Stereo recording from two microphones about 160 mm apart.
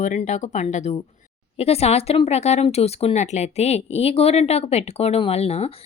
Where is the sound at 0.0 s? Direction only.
50° left (ahead or behind).